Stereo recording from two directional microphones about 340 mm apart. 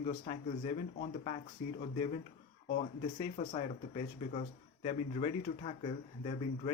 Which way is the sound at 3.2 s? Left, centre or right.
Centre.